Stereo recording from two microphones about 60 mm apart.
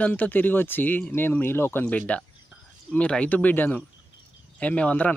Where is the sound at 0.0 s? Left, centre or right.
Left.